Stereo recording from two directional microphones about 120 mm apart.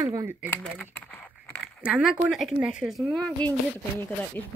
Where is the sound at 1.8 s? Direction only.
5° right (ahead or behind).